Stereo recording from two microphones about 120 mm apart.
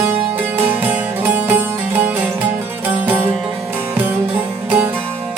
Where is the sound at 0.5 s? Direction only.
15° right (ahead or behind).